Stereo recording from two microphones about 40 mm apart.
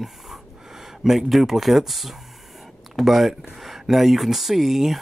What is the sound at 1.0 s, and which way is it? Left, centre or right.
Speech, centre.